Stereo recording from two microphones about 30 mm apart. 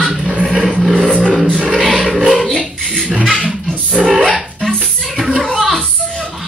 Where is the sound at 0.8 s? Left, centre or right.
Centre.